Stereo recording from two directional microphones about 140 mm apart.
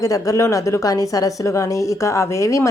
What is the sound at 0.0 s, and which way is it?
Speech, 25° left (ahead or behind).